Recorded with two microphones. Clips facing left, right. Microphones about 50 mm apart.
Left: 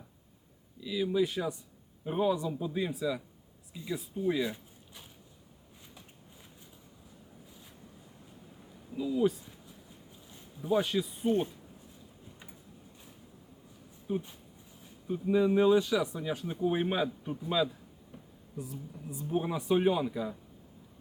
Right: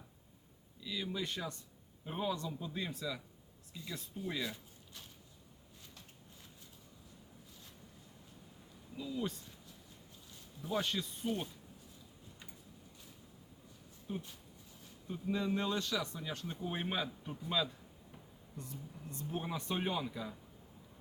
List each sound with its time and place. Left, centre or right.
0.8 s speech: centre
9.0 s speech: centre
11.3 s speech: left
14.1 s speech: left